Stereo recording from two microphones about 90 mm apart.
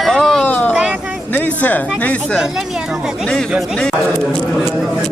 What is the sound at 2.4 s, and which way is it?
Speech, 5° right (ahead or behind).